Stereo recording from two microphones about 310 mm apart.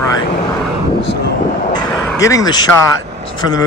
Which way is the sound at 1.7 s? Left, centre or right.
Centre.